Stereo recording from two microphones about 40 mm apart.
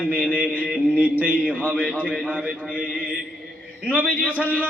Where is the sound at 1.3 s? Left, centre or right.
Right.